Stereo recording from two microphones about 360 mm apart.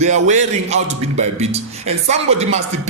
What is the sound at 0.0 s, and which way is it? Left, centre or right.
A man's voice, centre.